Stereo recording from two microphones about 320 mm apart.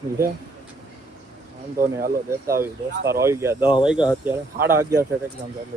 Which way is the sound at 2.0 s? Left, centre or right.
Right.